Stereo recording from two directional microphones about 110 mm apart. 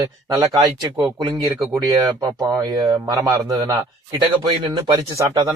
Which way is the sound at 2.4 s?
35° right (ahead or behind).